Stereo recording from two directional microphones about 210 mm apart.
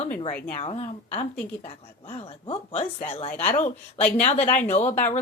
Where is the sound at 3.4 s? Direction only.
10° left (ahead or behind).